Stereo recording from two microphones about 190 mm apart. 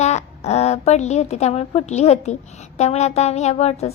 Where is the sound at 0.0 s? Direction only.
35° left (ahead or behind).